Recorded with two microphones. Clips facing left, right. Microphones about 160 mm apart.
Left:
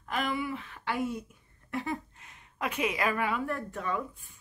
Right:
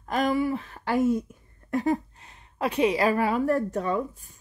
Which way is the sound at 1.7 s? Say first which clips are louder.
Right 9 dB; 40° right (ahead or behind).